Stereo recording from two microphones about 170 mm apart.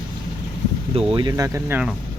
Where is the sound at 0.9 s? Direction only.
25° right (ahead or behind); by 1.9 s 10° right (ahead or behind).